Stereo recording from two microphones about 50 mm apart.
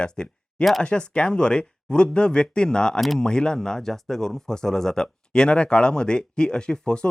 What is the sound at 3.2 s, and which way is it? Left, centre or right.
Speech, centre.